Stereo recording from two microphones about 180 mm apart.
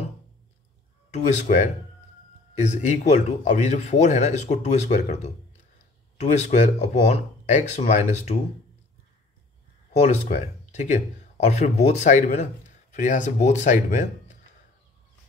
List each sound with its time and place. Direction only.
1.1 s speech: 45° left (ahead or behind)
9.9 s speech: 40° left (ahead or behind)